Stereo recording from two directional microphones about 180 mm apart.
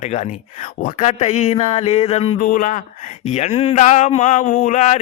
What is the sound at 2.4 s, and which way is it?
Speech, 50° left (ahead or behind).